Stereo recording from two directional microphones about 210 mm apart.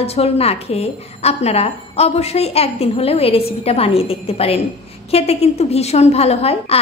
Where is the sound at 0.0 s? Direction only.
30° left (ahead or behind).